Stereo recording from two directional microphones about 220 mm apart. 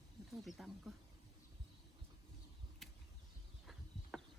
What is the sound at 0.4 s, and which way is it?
Speech, centre (ahead or behind).